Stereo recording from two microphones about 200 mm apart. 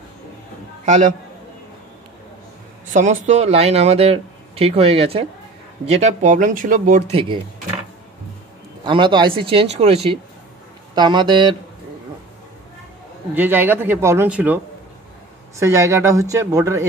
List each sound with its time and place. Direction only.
2.9 s speech: 40° right (ahead or behind)
8.8 s speech: 25° right (ahead or behind)
13.3 s a man's voice: 10° right (ahead or behind)
15.6 s a man's voice: 15° right (ahead or behind)